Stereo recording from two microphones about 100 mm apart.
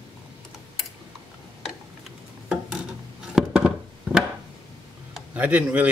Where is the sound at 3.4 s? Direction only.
5° right (ahead or behind).